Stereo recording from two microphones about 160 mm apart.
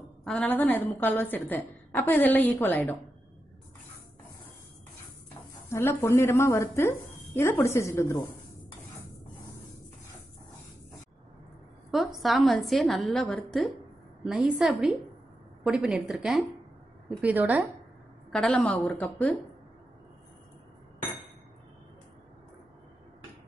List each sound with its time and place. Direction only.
0.2 s a woman's voice: 5° left (ahead or behind)
5.7 s a woman's voice: 15° left (ahead or behind)
11.9 s a woman's voice: centre (ahead or behind)
18.3 s a woman's voice: 5° left (ahead or behind)